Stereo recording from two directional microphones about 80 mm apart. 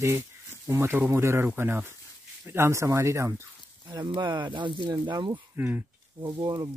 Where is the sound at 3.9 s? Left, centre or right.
Right.